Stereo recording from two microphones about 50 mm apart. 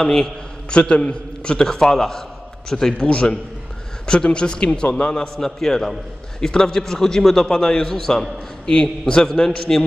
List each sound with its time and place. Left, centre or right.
0.0 s a man's voice: centre
5.1 s a man's voice: centre